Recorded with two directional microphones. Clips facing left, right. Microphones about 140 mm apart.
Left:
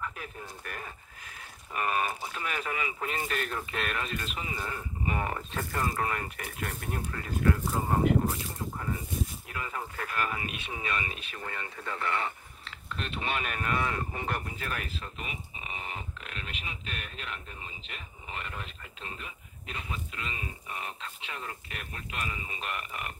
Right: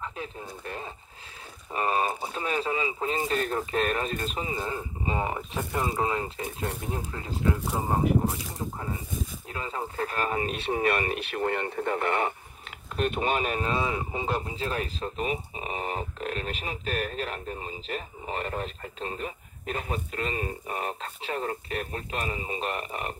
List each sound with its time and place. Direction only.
0.0 s speech: 25° right (ahead or behind)
9.5 s speech: 25° right (ahead or behind)
10.8 s speech: 60° right (ahead or behind); by 14.9 s 25° right (ahead or behind)
15.0 s speech: 35° right (ahead or behind)